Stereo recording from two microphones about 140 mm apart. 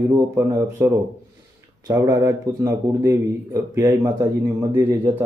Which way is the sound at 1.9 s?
25° right (ahead or behind).